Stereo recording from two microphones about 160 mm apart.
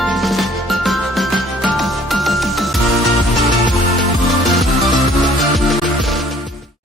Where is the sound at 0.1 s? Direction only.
Centre (ahead or behind).